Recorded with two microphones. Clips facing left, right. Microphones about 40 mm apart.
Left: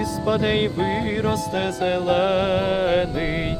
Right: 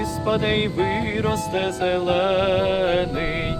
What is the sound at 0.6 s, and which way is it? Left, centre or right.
Music, centre.